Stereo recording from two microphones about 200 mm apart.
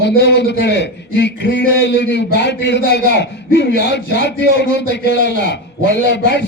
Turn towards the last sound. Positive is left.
turn(degrees=60)  # may be behind; listen again after turning